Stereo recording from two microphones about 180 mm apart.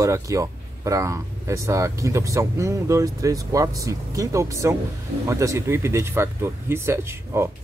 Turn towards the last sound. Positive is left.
turn(degrees=-15)  # may be behind; listen again after turning